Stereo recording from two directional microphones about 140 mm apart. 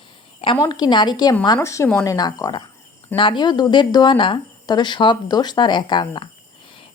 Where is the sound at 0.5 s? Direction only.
25° left (ahead or behind).